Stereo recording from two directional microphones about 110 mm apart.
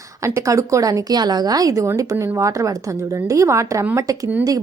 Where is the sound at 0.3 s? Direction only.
25° right (ahead or behind).